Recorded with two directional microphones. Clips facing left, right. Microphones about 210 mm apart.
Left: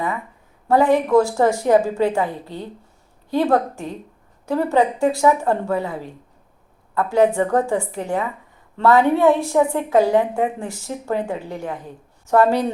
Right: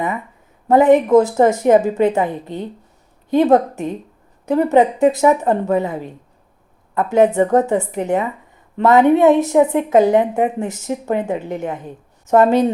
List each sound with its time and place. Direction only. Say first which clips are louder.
0.7 s a woman's voice: right 4 dB; 20° right (ahead or behind)